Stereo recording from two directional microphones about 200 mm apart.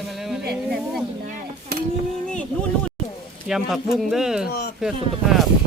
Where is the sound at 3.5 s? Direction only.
Centre (ahead or behind).